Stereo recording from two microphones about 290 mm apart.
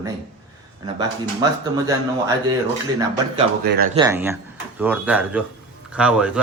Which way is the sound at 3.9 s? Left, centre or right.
Centre.